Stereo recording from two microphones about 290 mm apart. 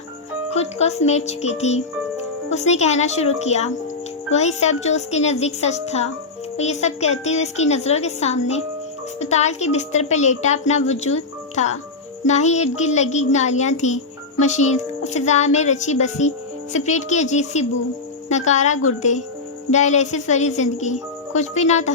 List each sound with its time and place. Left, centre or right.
0.5 s a woman's voice: left